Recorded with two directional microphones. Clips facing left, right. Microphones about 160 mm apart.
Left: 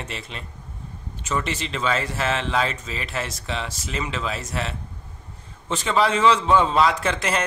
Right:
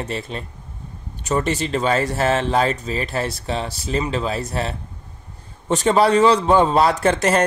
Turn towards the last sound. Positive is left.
turn(degrees=-40)  # may be behind; listen again after turning